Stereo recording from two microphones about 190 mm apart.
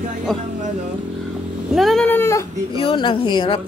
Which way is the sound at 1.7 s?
Centre (ahead or behind).